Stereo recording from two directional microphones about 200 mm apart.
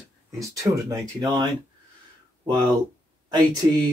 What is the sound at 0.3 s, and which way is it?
Speech, 15° right (ahead or behind).